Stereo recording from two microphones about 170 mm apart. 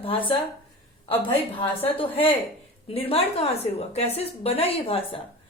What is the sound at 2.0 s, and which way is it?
Speech, 30° left (ahead or behind).